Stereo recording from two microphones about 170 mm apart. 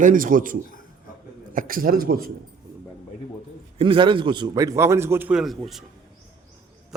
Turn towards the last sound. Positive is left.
turn(degrees=0)  # may be behind; listen again after turning